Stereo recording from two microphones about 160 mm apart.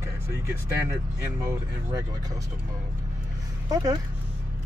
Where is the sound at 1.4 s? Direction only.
20° right (ahead or behind).